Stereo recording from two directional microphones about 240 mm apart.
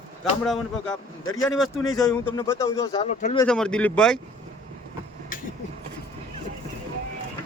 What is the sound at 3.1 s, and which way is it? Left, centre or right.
Speech, left.